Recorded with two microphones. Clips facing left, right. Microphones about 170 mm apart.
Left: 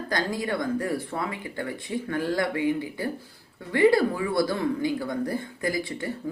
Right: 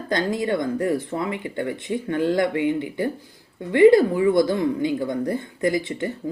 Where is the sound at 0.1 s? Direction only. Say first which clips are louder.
Right 6 dB; 20° right (ahead or behind).